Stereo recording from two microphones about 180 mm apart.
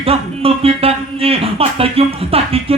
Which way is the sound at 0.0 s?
35° right (ahead or behind).